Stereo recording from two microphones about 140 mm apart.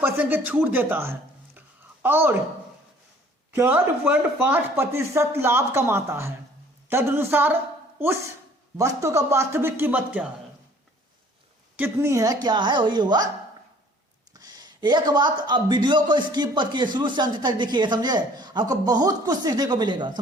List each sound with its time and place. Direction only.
0.0 s speech: 15° right (ahead or behind)
1.5 s a sound: 15° right (ahead or behind)
3.5 s speech: 15° right (ahead or behind)
11.8 s a woman's voice: 20° right (ahead or behind)
14.3 s speech: 30° right (ahead or behind)